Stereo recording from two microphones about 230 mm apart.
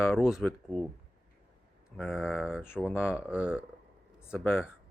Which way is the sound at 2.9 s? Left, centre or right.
Centre.